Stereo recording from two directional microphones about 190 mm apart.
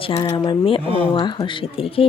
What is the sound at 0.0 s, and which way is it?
Speech, 25° left (ahead or behind).